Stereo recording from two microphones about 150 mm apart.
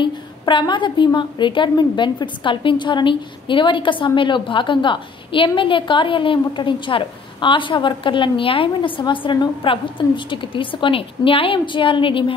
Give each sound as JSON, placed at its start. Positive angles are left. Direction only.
{"t": 0.0, "sound": "a woman's voice", "side_deg": 30}